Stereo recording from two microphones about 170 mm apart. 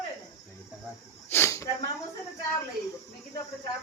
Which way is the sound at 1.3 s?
15° left (ahead or behind).